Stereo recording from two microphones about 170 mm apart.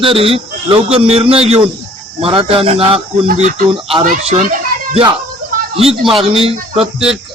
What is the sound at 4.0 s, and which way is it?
Speech, 45° right (ahead or behind).